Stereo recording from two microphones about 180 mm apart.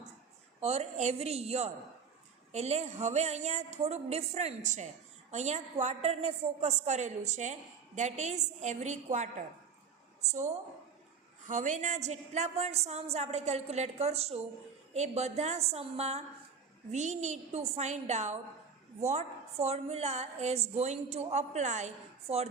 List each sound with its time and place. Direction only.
0.6 s a woman's voice: 35° right (ahead or behind)